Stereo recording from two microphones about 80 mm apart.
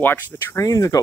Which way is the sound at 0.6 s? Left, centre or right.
Left.